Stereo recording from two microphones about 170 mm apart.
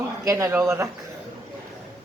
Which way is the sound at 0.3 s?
20° right (ahead or behind).